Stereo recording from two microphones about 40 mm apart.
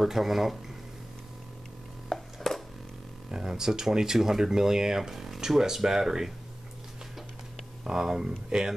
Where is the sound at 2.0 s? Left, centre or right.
Centre.